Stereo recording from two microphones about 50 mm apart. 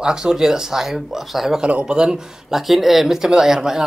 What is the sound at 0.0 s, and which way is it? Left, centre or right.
Speech, centre.